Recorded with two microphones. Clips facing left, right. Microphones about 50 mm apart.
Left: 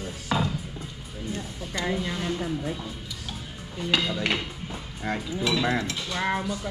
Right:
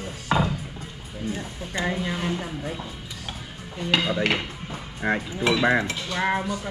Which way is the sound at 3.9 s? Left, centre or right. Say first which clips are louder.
Right 3 dB; right.